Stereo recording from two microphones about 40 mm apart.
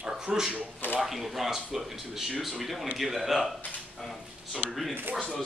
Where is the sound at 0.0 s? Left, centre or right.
Centre.